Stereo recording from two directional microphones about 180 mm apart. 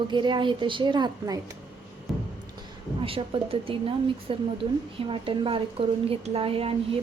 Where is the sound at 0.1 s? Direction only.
25° right (ahead or behind).